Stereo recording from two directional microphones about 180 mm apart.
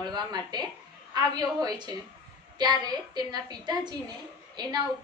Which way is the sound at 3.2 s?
25° right (ahead or behind).